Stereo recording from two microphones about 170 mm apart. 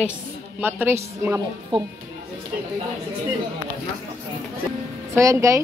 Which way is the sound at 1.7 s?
30° right (ahead or behind).